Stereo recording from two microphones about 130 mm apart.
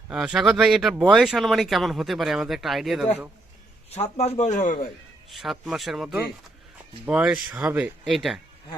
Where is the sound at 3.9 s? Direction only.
55° left (ahead or behind); by 4.9 s 85° left.